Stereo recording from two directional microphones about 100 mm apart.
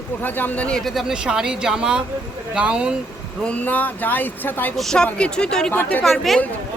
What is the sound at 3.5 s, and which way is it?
Speech, 15° left (ahead or behind).